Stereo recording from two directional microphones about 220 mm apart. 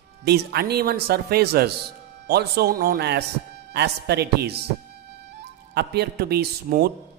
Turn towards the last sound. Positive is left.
turn(degrees=-45)  # may be behind; listen again after turning